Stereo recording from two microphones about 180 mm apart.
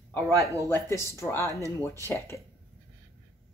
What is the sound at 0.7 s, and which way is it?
Speech, 15° left (ahead or behind).